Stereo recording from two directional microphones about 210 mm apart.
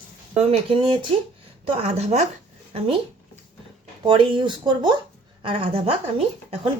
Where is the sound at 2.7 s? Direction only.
25° right (ahead or behind).